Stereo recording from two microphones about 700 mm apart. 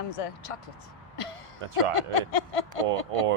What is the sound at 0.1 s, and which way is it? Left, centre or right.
Speech, left.